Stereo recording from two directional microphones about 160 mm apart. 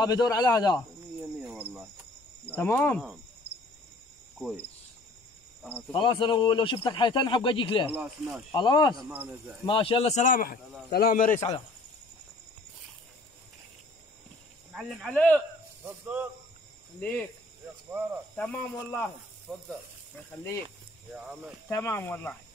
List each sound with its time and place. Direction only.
0.0 s a man's voice: 25° left (ahead or behind)
1.4 s cricket: 10° right (ahead or behind)
2.4 s cricket: 15° left (ahead or behind)
5.6 s speech: 10° right (ahead or behind)
5.9 s speech: 30° left (ahead or behind)
7.9 s speech: 5° right (ahead or behind)
8.5 s a man's voice: 30° left (ahead or behind); by 11.4 s 55° left (ahead or behind)
14.7 s speech: centre (ahead or behind)
15.1 s speech: 10° left (ahead or behind)
15.8 s speech: 10° right (ahead or behind)
17.0 s speech: 10° left (ahead or behind)
18.3 s speech: 10° left (ahead or behind)
21.6 s speech: 15° left (ahead or behind)